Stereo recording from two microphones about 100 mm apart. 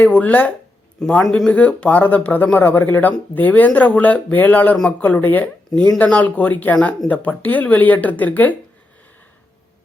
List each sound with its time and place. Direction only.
0.0 s speech: 15° left (ahead or behind)